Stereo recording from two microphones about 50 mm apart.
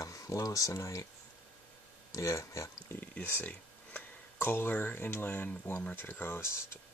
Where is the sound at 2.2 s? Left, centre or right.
Left.